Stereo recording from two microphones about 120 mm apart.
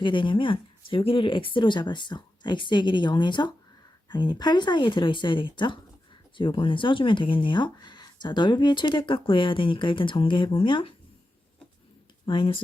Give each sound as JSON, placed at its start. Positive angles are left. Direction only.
{"t": 0.0, "sound": "speech", "side_deg": 45}
{"t": 12.2, "sound": "speech", "side_deg": 45}